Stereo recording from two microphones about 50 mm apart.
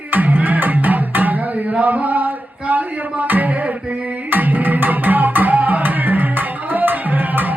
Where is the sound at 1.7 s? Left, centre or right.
Right.